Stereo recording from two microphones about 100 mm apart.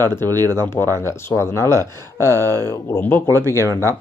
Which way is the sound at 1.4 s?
30° left (ahead or behind).